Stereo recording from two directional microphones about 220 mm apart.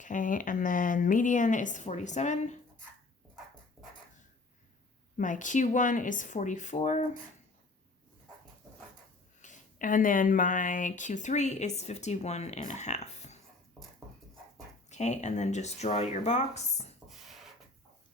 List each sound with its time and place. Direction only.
0.0 s a woman's voice: 35° left (ahead or behind)
5.1 s a woman's voice: 35° left (ahead or behind)
9.4 s a woman's voice: 35° left (ahead or behind)
14.8 s a woman's voice: 30° left (ahead or behind)
17.1 s a sound: centre (ahead or behind)